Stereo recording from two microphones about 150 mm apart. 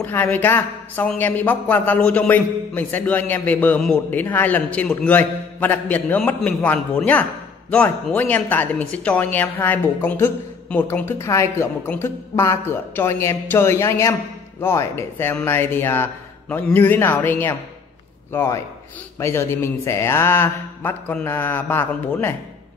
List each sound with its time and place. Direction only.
0.0 s speech: 15° left (ahead or behind)